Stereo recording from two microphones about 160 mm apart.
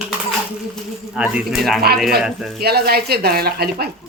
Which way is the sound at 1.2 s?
5° right (ahead or behind).